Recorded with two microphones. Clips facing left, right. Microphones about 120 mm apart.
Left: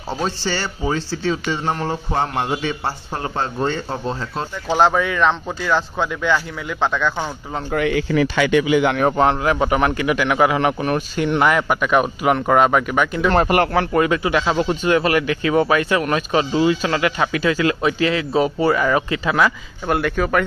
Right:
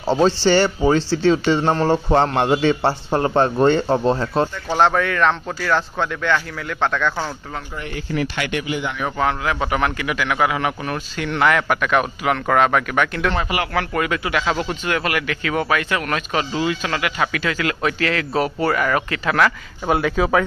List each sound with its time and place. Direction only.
0.1 s speech: 75° right (ahead or behind)
4.6 s speech: 5° left (ahead or behind)
7.7 s speech: 90° left
9.1 s speech: 30° left (ahead or behind); by 13.3 s 5° left (ahead or behind)
13.3 s speech: 50° left (ahead or behind)
13.7 s speech: 25° left (ahead or behind)
19.9 s speech: centre (ahead or behind)